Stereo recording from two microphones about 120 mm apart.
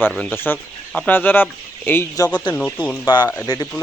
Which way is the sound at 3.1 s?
35° left (ahead or behind).